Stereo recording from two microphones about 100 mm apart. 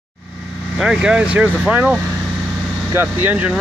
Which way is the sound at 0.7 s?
5° right (ahead or behind).